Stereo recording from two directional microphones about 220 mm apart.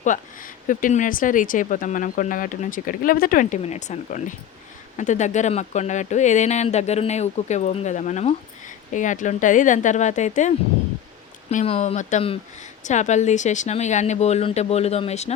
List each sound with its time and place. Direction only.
0.1 s speech: 35° left (ahead or behind)